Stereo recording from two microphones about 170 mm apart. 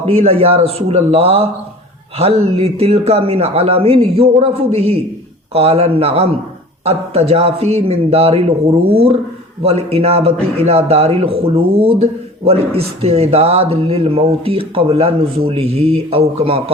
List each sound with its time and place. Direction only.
0.0 s a man's voice: 35° right (ahead or behind)